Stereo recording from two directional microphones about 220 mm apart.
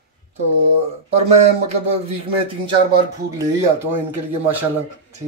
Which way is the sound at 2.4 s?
25° right (ahead or behind).